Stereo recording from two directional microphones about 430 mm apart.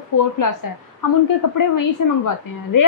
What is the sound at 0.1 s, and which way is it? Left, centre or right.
Speech, left.